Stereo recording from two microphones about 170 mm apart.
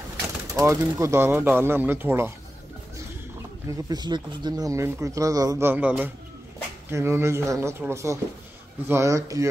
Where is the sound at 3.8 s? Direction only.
25° right (ahead or behind).